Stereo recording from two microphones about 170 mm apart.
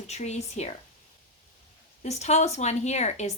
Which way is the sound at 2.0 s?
40° left (ahead or behind).